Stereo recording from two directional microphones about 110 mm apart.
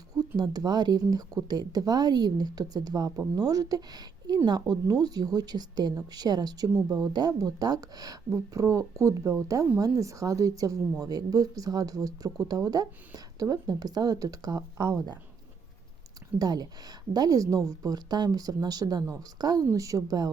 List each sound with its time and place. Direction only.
0.3 s speech: 40° right (ahead or behind)
16.4 s speech: 35° right (ahead or behind)